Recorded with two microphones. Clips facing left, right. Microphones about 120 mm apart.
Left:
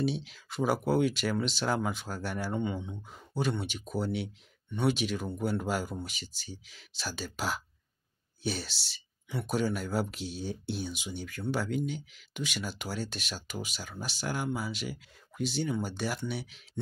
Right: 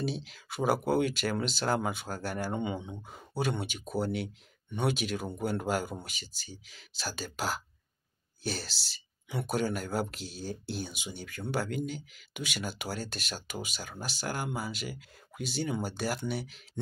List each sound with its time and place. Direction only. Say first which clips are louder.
0.0 s speech: left 3 dB; centre (ahead or behind)